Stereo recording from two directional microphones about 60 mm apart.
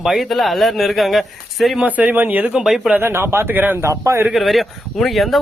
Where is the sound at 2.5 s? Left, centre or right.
Centre.